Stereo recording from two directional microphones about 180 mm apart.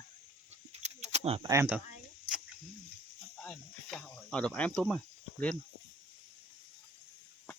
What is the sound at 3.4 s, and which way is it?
Snake, 5° left (ahead or behind).